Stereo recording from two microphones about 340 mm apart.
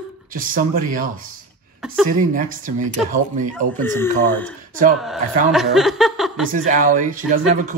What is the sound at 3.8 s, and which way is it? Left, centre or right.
Speech, centre.